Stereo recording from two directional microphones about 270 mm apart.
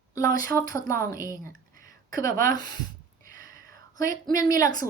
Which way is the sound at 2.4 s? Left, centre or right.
Centre.